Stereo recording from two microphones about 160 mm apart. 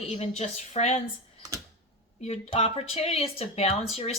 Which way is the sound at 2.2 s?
40° left (ahead or behind).